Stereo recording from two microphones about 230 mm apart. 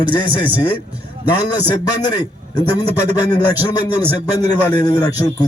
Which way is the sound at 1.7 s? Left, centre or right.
Centre.